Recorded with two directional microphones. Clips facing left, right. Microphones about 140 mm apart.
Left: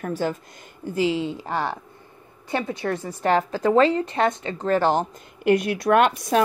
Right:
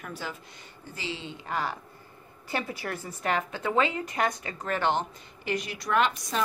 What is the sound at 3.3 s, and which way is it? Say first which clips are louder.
Speech: left 9 dB; 35° left (ahead or behind).